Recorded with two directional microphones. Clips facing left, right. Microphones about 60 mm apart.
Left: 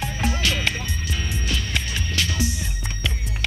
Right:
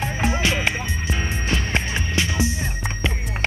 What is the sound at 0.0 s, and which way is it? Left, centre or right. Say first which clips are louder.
Music: right 3 dB; right.